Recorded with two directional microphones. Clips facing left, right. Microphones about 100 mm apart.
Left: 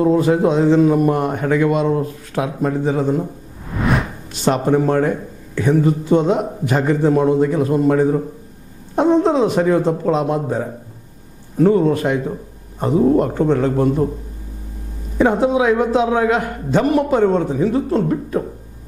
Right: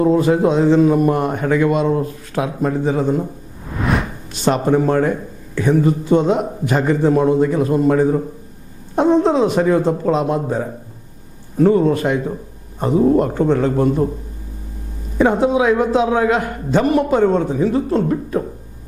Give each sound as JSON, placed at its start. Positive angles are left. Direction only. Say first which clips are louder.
{"t": 0.0, "sound": "a man's voice", "louder": "even", "side_deg": -25}
{"t": 3.7, "sound": "music", "louder": "left 1 dB", "side_deg": 0}
{"t": 4.5, "sound": "a man's voice", "louder": "even", "side_deg": -25}
{"t": 15.1, "sound": "a man's voice", "louder": "even", "side_deg": -20}